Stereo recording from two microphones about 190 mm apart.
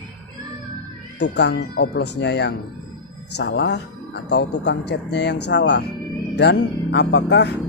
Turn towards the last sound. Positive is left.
turn(degrees=65)  # may be behind; listen again after turning